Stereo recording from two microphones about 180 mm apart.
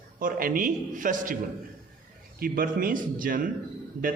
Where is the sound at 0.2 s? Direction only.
50° right (ahead or behind).